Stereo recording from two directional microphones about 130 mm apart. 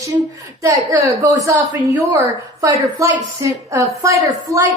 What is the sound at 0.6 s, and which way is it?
A woman's voice, 25° right (ahead or behind).